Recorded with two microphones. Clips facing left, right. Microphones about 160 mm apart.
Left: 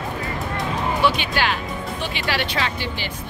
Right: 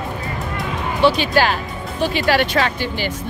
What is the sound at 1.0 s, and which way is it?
Speech, 40° right (ahead or behind).